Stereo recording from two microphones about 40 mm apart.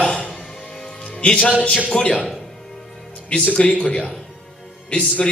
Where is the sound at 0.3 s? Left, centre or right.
Centre.